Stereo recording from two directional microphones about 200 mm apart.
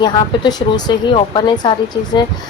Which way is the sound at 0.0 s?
20° left (ahead or behind).